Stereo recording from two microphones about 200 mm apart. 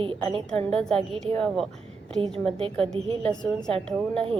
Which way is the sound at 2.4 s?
30° right (ahead or behind).